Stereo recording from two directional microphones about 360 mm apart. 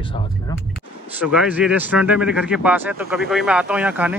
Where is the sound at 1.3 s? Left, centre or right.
Centre.